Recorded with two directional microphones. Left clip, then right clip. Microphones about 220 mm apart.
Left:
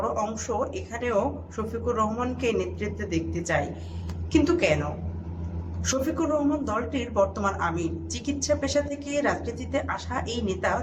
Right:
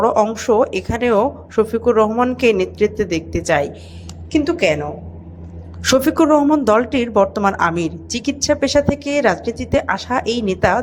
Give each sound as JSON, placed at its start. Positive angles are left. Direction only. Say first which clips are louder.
{"t": 0.0, "sound": "speech", "louder": "right 13 dB", "side_deg": -45}
{"t": 4.3, "sound": "a woman's voice", "louder": "right 6 dB", "side_deg": -30}
{"t": 5.8, "sound": "a woman's voice", "louder": "right 13 dB", "side_deg": -45}